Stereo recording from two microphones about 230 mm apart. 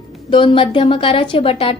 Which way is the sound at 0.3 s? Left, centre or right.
Left.